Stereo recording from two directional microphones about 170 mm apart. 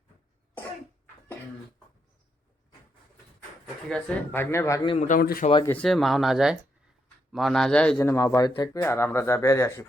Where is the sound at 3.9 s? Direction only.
10° left (ahead or behind).